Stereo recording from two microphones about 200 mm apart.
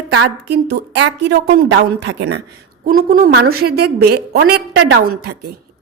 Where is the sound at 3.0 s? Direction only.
50° right (ahead or behind).